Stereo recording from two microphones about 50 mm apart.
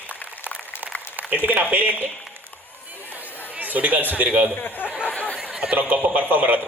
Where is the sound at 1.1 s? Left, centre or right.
Right.